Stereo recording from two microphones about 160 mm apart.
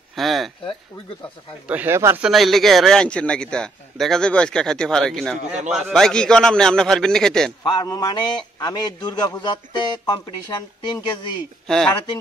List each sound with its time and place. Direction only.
0.1 s speech: centre (ahead or behind)
1.7 s speech: 15° right (ahead or behind)
2.2 s a man's voice: centre (ahead or behind)
7.6 s a man's voice: 25° left (ahead or behind)
11.6 s speech: 5° left (ahead or behind)